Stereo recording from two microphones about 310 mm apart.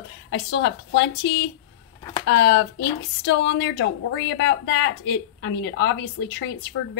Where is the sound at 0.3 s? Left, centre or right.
Left.